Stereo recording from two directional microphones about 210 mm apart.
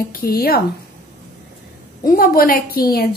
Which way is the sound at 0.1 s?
45° left (ahead or behind).